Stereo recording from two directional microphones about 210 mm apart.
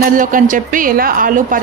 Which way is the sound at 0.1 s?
40° right (ahead or behind).